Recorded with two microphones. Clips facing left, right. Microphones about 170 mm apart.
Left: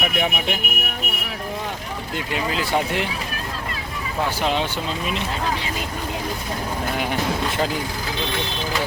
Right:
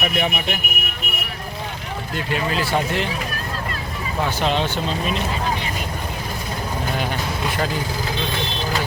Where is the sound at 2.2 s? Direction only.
15° left (ahead or behind).